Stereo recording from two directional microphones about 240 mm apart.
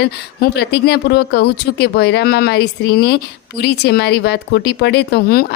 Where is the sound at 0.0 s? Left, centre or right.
Left.